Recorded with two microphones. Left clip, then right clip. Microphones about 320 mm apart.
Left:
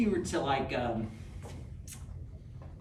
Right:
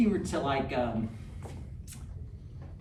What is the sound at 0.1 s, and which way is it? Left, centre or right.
Speech, centre.